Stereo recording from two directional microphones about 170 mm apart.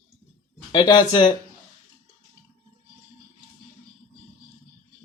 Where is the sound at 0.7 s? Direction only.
25° left (ahead or behind).